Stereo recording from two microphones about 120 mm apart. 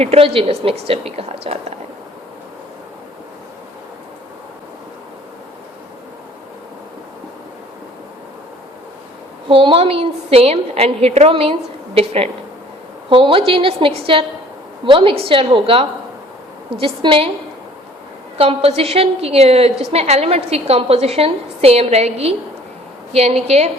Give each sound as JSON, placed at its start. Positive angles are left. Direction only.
{"t": 0.0, "sound": "a woman's voice", "side_deg": -55}
{"t": 9.5, "sound": "a woman's voice", "side_deg": -45}
{"t": 18.3, "sound": "a woman's voice", "side_deg": -55}